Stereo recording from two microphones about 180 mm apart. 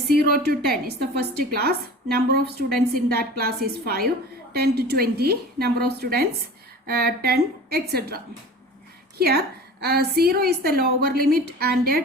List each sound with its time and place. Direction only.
0.1 s a woman's voice: 60° right (ahead or behind)